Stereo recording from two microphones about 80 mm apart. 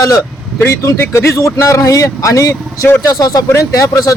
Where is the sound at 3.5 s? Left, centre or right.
Left.